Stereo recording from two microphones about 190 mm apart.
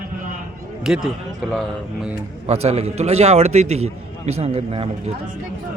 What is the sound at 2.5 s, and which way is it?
A man's voice, 35° right (ahead or behind).